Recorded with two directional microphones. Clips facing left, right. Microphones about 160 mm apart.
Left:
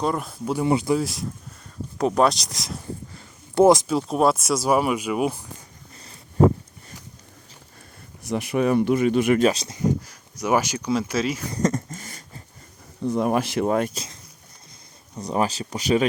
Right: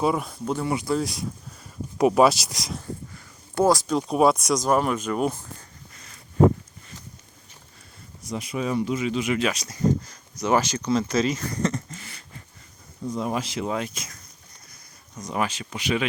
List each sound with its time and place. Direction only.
0.0 s speech: centre (ahead or behind)
0.6 s speech: 25° left (ahead or behind)
0.9 s speech: centre (ahead or behind)
3.2 s a sound: 20° left (ahead or behind)
3.8 s speech: centre (ahead or behind)
8.3 s speech: 65° left (ahead or behind)
9.5 s speech: 30° left (ahead or behind)
9.7 s speech: 10° left (ahead or behind)
11.6 s a sound: 45° left (ahead or behind)
13.1 s speech: 60° left (ahead or behind)
13.9 s speech: 30° left (ahead or behind)